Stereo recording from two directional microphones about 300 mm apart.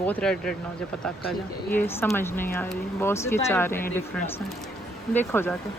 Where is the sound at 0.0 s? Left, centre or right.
Centre.